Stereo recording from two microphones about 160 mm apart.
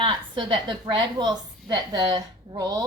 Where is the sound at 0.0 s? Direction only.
30° right (ahead or behind).